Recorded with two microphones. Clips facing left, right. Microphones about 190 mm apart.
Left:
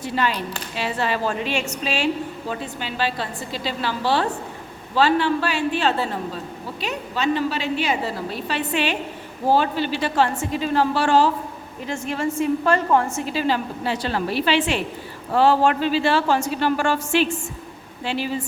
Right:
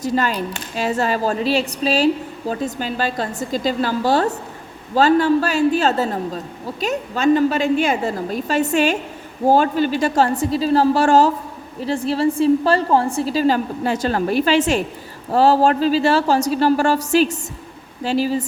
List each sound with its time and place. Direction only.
0.0 s a woman's voice: 40° right (ahead or behind)